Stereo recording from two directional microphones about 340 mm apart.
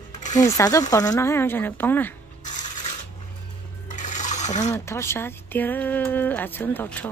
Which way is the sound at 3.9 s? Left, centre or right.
Left.